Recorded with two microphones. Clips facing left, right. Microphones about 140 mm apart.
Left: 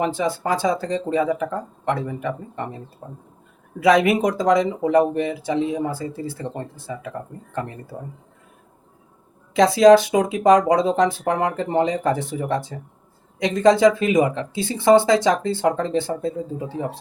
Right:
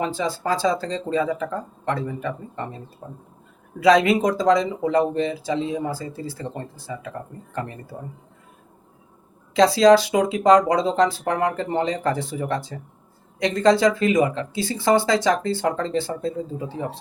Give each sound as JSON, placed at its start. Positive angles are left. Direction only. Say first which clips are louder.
{"t": 0.0, "sound": "speech", "louder": "left 2 dB", "side_deg": 20}
{"t": 3.8, "sound": "speech", "louder": "even", "side_deg": 20}
{"t": 9.6, "sound": "speech", "louder": "left 2 dB", "side_deg": 20}